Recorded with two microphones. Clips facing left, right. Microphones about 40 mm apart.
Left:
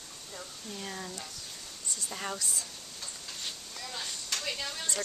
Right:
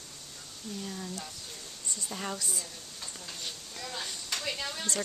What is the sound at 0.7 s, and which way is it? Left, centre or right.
Speech, left.